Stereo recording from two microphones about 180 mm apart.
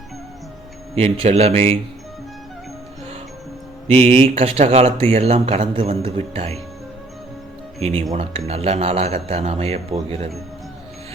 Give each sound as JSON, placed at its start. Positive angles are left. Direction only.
{"t": 0.9, "sound": "speech", "side_deg": -35}
{"t": 3.8, "sound": "speech", "side_deg": -35}
{"t": 7.8, "sound": "speech", "side_deg": -35}